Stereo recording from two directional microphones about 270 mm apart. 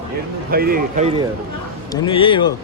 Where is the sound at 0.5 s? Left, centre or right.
Right.